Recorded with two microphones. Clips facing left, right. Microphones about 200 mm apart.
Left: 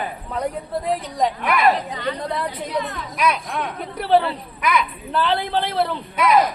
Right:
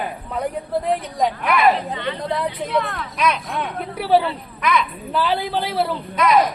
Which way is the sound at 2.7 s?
60° right (ahead or behind).